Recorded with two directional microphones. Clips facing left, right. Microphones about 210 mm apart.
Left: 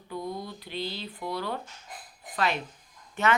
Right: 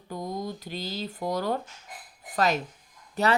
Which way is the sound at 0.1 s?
40° right (ahead or behind).